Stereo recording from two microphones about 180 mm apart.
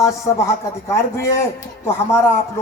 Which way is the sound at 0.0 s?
15° left (ahead or behind).